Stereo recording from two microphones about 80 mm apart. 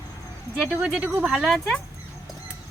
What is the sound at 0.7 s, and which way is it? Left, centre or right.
Speech, centre.